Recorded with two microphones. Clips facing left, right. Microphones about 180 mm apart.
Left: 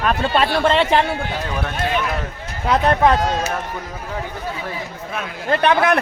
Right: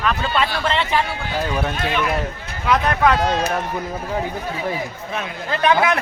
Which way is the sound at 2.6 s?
30° left (ahead or behind).